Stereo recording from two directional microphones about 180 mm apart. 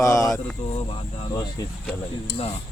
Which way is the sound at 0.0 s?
15° left (ahead or behind).